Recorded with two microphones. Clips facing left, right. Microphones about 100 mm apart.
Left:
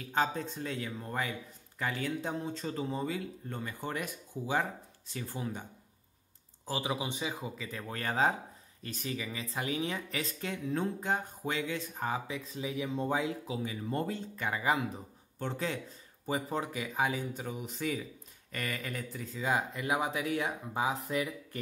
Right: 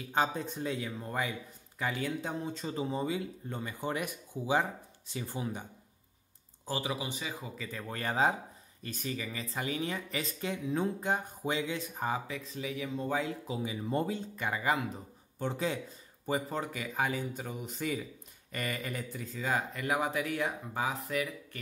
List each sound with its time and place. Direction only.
0.1 s speech: 15° right (ahead or behind)
6.8 s speech: 20° left (ahead or behind)
7.5 s speech: 5° left (ahead or behind); by 11.8 s 20° right (ahead or behind)
11.9 s speech: 5° right (ahead or behind)
12.3 s speech: 20° left (ahead or behind)
13.2 s speech: 5° left (ahead or behind)
13.6 s speech: 15° right (ahead or behind)
14.6 s speech: 5° left (ahead or behind)
15.3 s speech: 10° right (ahead or behind)
16.3 s speech: centre (ahead or behind)
19.4 s speech: 15° left (ahead or behind)
20.9 s speech: 30° left (ahead or behind)